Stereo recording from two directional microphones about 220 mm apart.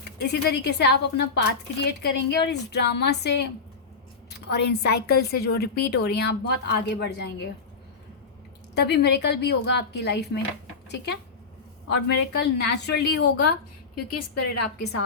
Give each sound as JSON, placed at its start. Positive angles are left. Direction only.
{"t": 0.2, "sound": "a woman's voice", "side_deg": 50}
{"t": 8.7, "sound": "a woman's voice", "side_deg": 50}
{"t": 13.9, "sound": "a woman's voice", "side_deg": 90}